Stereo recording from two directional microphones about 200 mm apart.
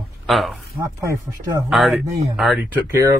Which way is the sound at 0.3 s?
Centre (ahead or behind).